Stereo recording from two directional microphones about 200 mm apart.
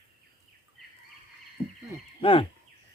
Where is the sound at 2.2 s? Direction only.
25° left (ahead or behind).